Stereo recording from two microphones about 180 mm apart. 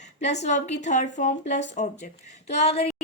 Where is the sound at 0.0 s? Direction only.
40° left (ahead or behind).